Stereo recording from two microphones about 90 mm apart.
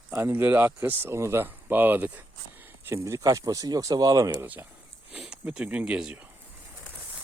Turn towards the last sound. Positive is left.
turn(degrees=-10)  # may be behind; listen again after turning